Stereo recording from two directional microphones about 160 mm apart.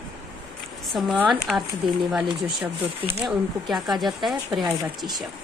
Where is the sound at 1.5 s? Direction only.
Centre (ahead or behind).